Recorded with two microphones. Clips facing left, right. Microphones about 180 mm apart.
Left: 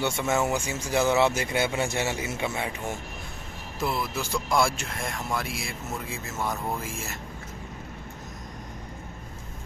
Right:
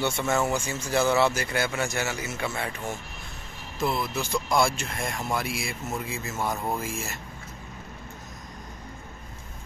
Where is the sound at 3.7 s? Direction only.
5° left (ahead or behind).